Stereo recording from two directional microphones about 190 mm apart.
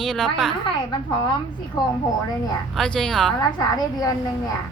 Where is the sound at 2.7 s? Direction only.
5° left (ahead or behind).